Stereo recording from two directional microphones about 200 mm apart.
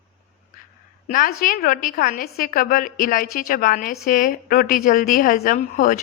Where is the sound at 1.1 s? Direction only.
45° left (ahead or behind).